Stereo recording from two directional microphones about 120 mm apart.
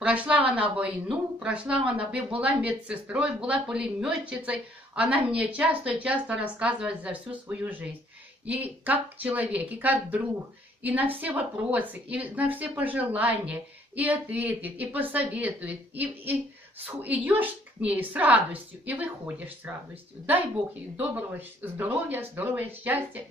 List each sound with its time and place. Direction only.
0.0 s speech: 10° right (ahead or behind)
20.9 s speech: 15° right (ahead or behind)